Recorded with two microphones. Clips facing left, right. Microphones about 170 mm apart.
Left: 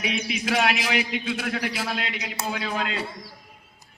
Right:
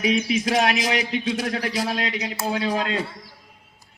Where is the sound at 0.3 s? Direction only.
40° right (ahead or behind).